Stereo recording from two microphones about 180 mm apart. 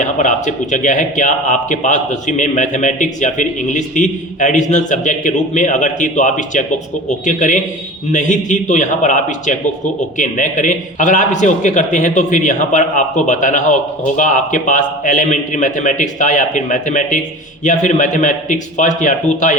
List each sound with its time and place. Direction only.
0.0 s a man's voice: 45° left (ahead or behind)